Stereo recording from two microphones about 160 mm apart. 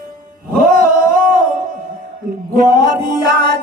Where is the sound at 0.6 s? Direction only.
60° right (ahead or behind).